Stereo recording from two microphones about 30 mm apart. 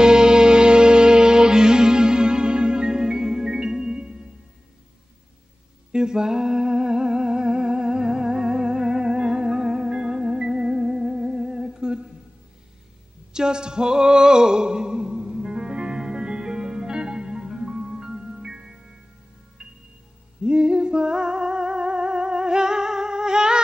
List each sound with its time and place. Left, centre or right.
0.0 s music: right
5.9 s humming: right
13.3 s a sound: right
16.0 s music: right
20.4 s music: right